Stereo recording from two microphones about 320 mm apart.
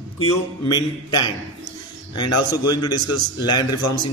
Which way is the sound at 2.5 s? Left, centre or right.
Centre.